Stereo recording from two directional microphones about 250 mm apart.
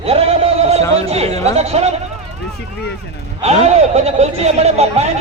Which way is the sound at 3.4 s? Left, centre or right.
Right.